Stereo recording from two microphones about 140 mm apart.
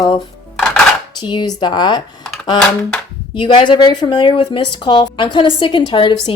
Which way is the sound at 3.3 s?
35° left (ahead or behind).